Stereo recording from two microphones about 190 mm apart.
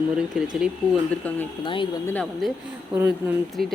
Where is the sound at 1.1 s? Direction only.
5° left (ahead or behind).